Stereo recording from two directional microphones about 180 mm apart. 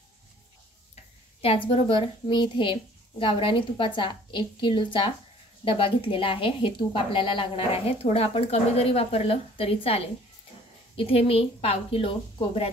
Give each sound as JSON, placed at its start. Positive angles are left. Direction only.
{"t": 1.4, "sound": "a child's voice", "side_deg": 30}